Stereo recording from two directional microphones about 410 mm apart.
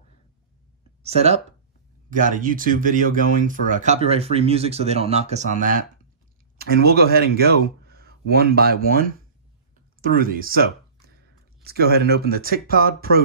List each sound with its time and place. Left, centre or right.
1.0 s speech: centre
6.6 s speech: right
10.0 s speech: right